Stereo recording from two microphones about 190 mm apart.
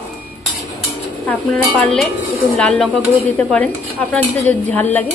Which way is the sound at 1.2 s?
Centre (ahead or behind).